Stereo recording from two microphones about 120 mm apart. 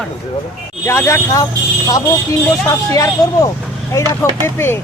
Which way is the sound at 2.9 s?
30° left (ahead or behind).